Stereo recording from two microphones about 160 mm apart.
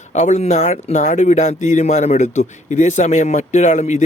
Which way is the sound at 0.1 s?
50° left (ahead or behind).